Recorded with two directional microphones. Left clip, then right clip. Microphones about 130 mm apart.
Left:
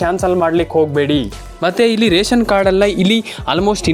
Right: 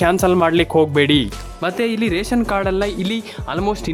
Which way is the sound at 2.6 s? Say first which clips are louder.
Left 8 dB; 20° left (ahead or behind).